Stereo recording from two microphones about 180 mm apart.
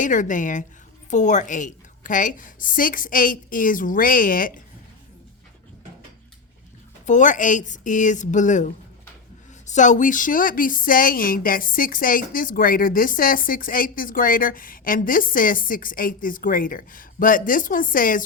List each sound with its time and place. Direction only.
0.0 s a woman's voice: 45° left (ahead or behind)
7.0 s a woman's voice: 45° left (ahead or behind)